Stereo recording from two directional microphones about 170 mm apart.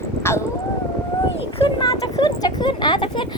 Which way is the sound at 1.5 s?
35° left (ahead or behind).